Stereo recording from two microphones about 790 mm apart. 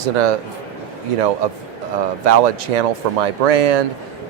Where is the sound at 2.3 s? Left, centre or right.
Right.